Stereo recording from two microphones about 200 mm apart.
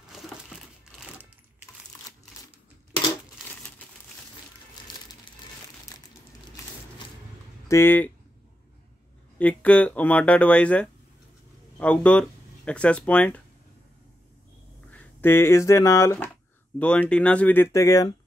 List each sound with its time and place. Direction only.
3.4 s crumpling: 5° left (ahead or behind)
4.9 s crumpling: 25° left (ahead or behind)
7.6 s speech: 10° left (ahead or behind)
9.4 s speech: 5° left (ahead or behind)
14.9 s speech: 10° left (ahead or behind)